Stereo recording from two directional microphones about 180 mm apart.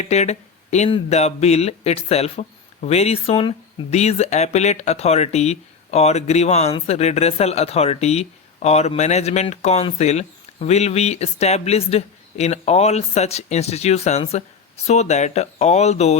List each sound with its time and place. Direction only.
0.0 s speech: 40° left (ahead or behind)